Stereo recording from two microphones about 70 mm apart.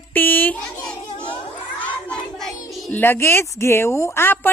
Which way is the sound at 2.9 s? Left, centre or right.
Left.